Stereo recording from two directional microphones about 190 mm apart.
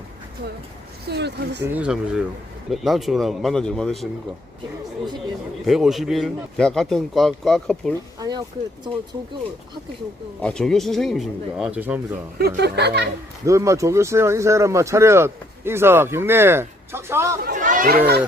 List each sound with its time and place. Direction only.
1.0 s speech: 60° right (ahead or behind)
1.6 s speech: 5° right (ahead or behind)
5.6 s speech: centre (ahead or behind)
8.2 s speech: 20° right (ahead or behind)
10.4 s speech: 5° left (ahead or behind)
12.4 s speech: 60° right (ahead or behind)
13.4 s speech: 15° right (ahead or behind)
17.4 s speech: 45° right (ahead or behind)